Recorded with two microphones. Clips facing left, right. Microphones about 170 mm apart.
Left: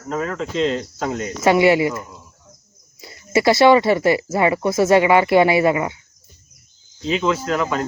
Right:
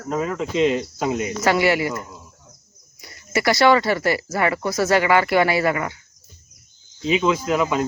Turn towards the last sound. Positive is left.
turn(degrees=-15)  # may be behind; listen again after turning